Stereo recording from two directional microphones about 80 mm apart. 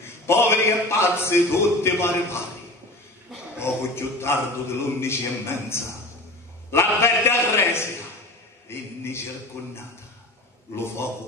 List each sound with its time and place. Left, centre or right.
0.3 s a man's voice: left
3.5 s a man's voice: left